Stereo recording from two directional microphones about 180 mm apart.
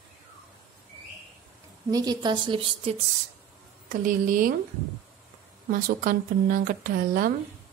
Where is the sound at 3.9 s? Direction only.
50° right (ahead or behind).